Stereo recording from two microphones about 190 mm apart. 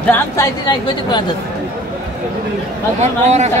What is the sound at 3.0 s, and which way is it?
Speech, 35° right (ahead or behind).